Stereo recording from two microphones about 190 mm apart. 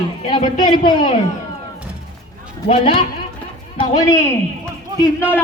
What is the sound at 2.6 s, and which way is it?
Speech, 30° left (ahead or behind).